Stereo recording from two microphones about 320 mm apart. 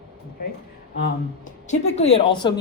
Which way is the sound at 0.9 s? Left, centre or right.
Left.